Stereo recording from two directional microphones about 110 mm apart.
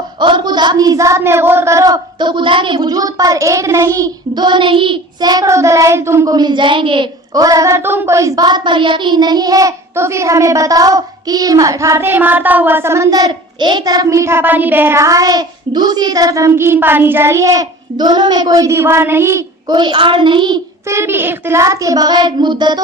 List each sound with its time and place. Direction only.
0.2 s a woman's voice: 45° right (ahead or behind); by 6.3 s 25° right (ahead or behind)
6.3 s a child's voice: 40° right (ahead or behind)
7.3 s speech: 30° right (ahead or behind)
19.7 s a child's voice: 45° right (ahead or behind)
20.8 s a woman's voice: 25° right (ahead or behind); by 22.8 s 40° right (ahead or behind)